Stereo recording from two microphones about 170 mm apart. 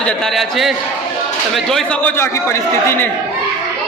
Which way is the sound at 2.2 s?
15° left (ahead or behind).